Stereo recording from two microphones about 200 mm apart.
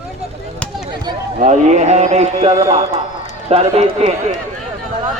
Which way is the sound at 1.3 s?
35° right (ahead or behind).